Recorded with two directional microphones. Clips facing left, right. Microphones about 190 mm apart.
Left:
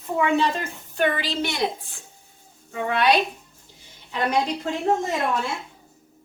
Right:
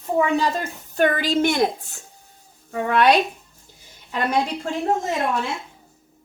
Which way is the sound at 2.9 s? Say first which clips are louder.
Right 3 dB; 50° right (ahead or behind).